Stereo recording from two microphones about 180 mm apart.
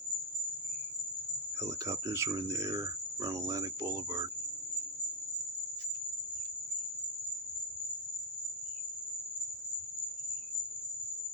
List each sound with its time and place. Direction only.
1.6 s speech: 15° right (ahead or behind)